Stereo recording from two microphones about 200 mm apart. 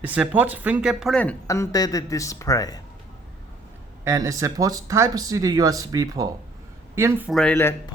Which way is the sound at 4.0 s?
15° right (ahead or behind).